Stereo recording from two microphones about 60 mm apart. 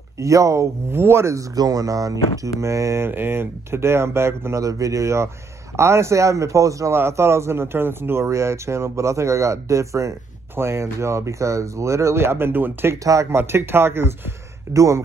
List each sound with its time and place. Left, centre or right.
0.2 s a man's voice: right
0.9 s speech: right
1.3 s speech: right
2.6 s a man's voice: right
3.0 s speech: right
4.6 s a man's voice: right
6.9 s speech: right
10.5 s speech: right
13.0 s speech: right
13.3 s speech: right
14.7 s a man's voice: right